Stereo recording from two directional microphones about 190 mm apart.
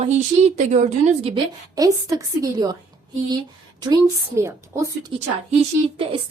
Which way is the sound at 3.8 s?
20° right (ahead or behind).